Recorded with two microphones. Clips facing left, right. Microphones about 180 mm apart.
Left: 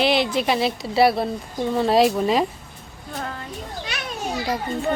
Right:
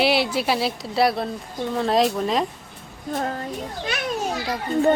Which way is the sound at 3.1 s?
40° right (ahead or behind).